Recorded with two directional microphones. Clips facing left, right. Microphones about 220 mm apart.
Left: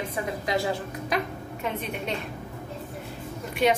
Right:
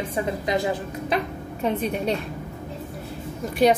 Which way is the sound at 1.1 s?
35° right (ahead or behind).